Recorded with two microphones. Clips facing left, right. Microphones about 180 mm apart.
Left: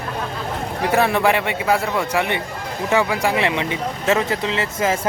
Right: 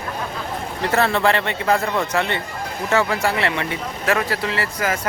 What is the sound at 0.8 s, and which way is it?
A man's voice, 15° left (ahead or behind).